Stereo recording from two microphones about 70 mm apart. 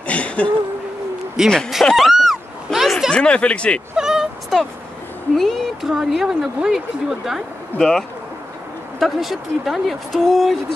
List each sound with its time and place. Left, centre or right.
0.0 s a sound: centre
1.4 s speech: centre
2.0 s a sound: centre
3.1 s speech: centre
3.9 s dog: centre
5.3 s speech: centre
7.7 s speech: left
9.0 s speech: centre